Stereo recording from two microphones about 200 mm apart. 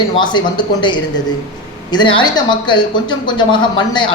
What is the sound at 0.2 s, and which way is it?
A woman's voice, 20° left (ahead or behind).